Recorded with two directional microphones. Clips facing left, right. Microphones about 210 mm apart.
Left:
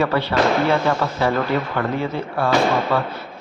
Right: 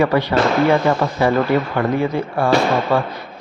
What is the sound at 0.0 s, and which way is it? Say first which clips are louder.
Speech: right 3 dB; 15° right (ahead or behind).